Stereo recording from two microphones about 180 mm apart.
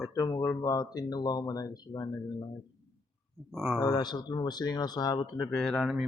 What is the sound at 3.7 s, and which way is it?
Speech, 20° left (ahead or behind).